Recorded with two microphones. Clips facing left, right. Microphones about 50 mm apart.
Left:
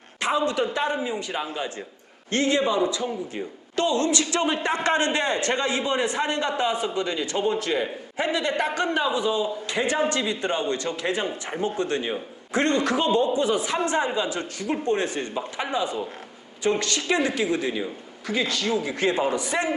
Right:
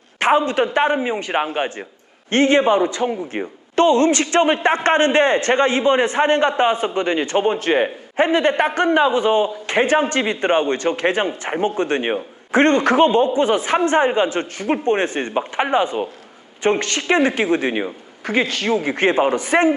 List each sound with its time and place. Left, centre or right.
0.2 s a man's voice: right